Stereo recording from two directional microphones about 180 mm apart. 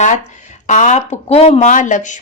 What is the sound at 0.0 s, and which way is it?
Speech, 40° left (ahead or behind).